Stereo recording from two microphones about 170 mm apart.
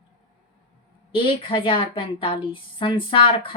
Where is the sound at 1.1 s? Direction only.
30° left (ahead or behind).